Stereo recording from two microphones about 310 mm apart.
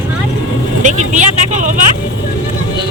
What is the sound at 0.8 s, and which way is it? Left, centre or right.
Vehicle, right.